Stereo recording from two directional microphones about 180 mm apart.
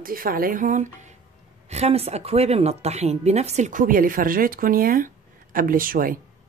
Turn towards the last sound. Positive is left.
turn(degrees=-50)  # may be behind; listen again after turning